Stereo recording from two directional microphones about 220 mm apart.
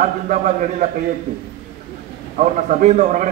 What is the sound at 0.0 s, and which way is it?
Speech, 35° right (ahead or behind).